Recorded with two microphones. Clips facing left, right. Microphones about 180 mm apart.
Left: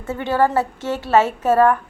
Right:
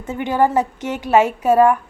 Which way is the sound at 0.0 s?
15° right (ahead or behind).